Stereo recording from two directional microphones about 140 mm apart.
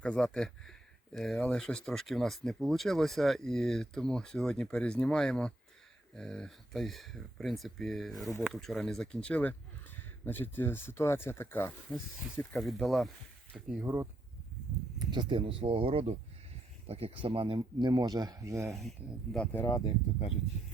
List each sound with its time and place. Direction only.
0.0 s speech: 5° left (ahead or behind)
12.4 s speech: 5° left (ahead or behind)
13.8 s speech: 20° right (ahead or behind)
14.9 s speech: 35° right (ahead or behind)
17.6 s speech: 30° right (ahead or behind)
18.7 s speech: centre (ahead or behind)
19.6 s speech: 25° left (ahead or behind)